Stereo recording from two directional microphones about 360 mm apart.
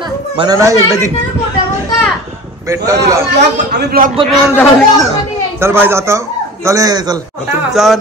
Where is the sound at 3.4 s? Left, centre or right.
Right.